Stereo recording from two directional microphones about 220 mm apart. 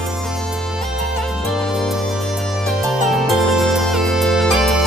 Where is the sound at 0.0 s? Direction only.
Centre (ahead or behind).